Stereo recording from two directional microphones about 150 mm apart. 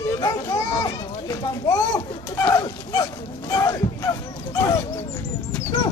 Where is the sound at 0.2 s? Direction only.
20° left (ahead or behind).